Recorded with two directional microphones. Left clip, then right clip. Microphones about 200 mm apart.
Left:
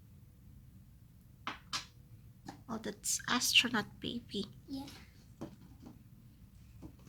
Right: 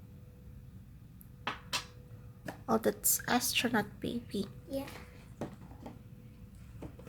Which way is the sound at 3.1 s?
5° right (ahead or behind).